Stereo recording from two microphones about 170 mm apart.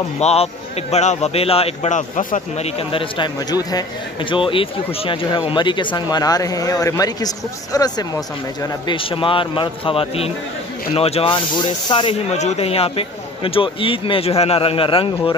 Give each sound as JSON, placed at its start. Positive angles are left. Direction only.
{"t": 0.2, "sound": "speech", "side_deg": 40}
{"t": 2.9, "sound": "speech", "side_deg": 30}